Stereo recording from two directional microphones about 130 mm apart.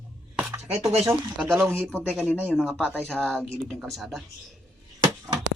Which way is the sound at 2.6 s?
5° left (ahead or behind).